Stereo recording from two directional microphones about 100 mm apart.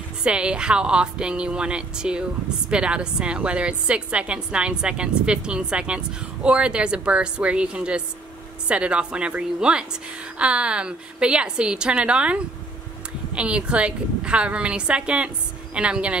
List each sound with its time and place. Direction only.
0.2 s a woman's voice: 10° right (ahead or behind)